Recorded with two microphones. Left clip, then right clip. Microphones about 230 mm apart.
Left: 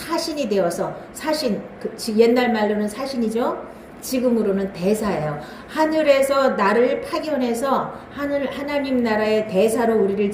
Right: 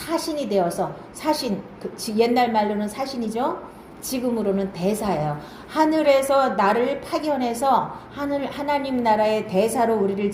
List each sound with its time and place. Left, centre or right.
0.1 s a woman's voice: centre